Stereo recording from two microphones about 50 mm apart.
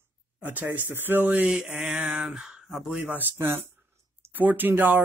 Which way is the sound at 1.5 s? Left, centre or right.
Centre.